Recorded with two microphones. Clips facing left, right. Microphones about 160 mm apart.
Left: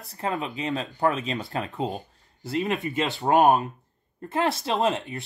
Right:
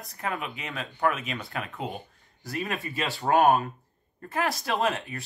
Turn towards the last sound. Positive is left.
turn(degrees=25)  # may be behind; listen again after turning